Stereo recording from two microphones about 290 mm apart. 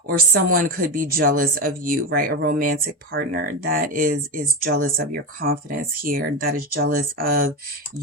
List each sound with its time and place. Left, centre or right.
0.4 s speech: right